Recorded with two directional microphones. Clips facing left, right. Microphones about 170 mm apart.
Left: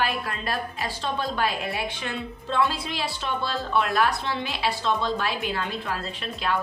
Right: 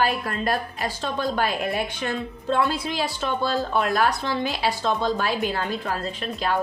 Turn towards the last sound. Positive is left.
turn(degrees=-40)  # may be behind; listen again after turning